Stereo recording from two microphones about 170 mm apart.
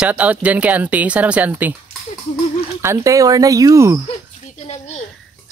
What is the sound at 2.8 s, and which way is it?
Speech, 15° right (ahead or behind).